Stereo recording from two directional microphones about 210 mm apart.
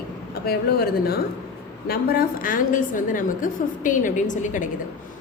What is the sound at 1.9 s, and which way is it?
A woman's voice, 45° left (ahead or behind).